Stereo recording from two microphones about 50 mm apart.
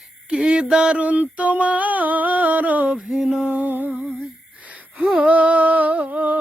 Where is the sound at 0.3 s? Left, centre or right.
Centre.